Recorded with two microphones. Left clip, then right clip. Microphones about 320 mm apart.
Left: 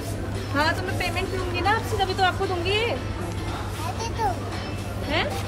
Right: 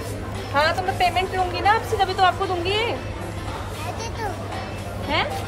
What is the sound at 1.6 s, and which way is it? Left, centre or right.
Speech, centre.